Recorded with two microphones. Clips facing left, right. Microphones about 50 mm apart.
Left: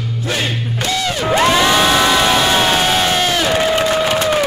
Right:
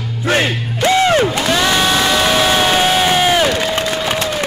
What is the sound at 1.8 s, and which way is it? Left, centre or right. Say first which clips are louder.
Crowd: left 1 dB; centre.